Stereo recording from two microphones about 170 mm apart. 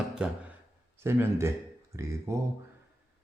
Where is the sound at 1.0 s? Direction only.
15° right (ahead or behind).